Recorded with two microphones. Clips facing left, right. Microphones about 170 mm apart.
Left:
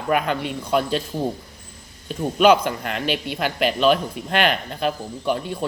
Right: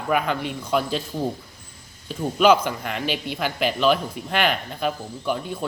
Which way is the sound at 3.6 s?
15° left (ahead or behind).